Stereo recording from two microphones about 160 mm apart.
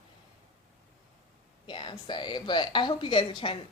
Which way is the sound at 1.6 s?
30° left (ahead or behind).